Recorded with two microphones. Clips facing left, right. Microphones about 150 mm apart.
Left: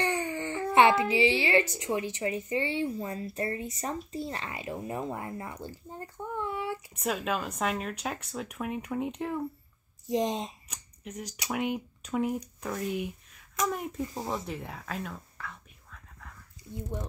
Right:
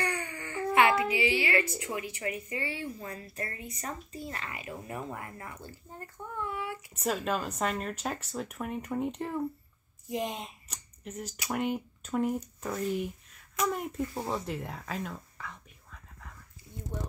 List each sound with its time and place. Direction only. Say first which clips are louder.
0.0 s a sound: left 5 dB; 30° left (ahead or behind)
1.8 s speech: left 5 dB; 25° left (ahead or behind)
7.0 s speech: right 1 dB; 5° left (ahead or behind)
10.0 s speech: left 5 dB; 35° left (ahead or behind)
10.7 s speech: even; 10° left (ahead or behind)
14.7 s whispering: even; centre (ahead or behind)